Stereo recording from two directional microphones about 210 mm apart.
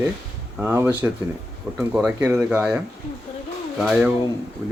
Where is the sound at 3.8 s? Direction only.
5° right (ahead or behind).